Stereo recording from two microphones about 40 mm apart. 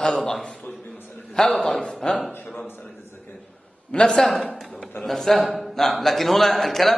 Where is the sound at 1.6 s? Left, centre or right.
Centre.